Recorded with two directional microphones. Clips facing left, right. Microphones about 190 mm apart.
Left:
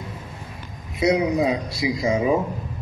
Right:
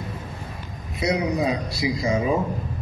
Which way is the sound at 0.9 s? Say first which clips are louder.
Left 4 dB; 20° left (ahead or behind).